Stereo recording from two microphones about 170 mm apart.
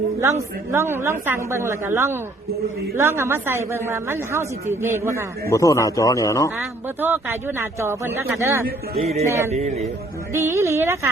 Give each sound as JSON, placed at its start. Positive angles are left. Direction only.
{"t": 0.2, "sound": "a woman's voice", "side_deg": -15}
{"t": 5.5, "sound": "speech", "side_deg": 20}
{"t": 6.8, "sound": "a woman's voice", "side_deg": -10}
{"t": 9.0, "sound": "a man's voice", "side_deg": -40}
{"t": 10.3, "sound": "a woman's voice", "side_deg": -15}